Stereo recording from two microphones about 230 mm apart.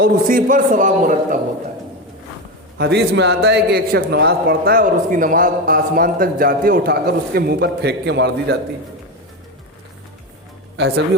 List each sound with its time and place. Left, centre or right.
0.0 s a man's voice: right
2.7 s a man's voice: right
10.8 s speech: right